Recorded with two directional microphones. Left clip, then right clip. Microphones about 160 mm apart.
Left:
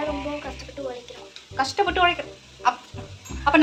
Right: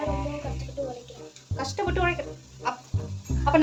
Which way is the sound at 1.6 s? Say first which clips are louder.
Left 7 dB; 5° left (ahead or behind).